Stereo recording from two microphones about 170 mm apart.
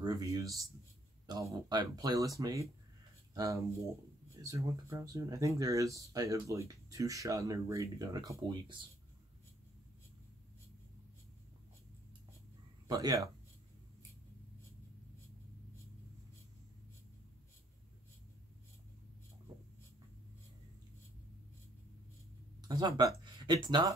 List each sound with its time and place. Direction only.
0.0 s speech: 20° right (ahead or behind)
12.8 s speech: 20° right (ahead or behind)
22.6 s speech: 25° right (ahead or behind)